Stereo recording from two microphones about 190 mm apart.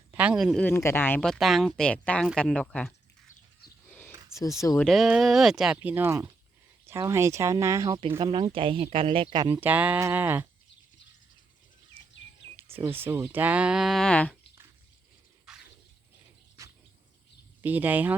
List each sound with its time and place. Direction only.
0.1 s speech: 5° right (ahead or behind)
0.5 s speech: 10° left (ahead or behind)
3.9 s a sound: 15° left (ahead or behind)
4.8 s speech: centre (ahead or behind); by 9.6 s 20° right (ahead or behind)
9.6 s speech: 10° right (ahead or behind)
12.0 s a sound: 10° right (ahead or behind)
12.8 s speech: 10° right (ahead or behind); by 14.3 s 5° left (ahead or behind)
15.5 s a sound: centre (ahead or behind)
17.6 s speech: 10° right (ahead or behind)